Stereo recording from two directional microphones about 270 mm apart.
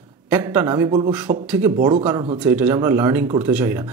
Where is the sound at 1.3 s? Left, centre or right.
Right.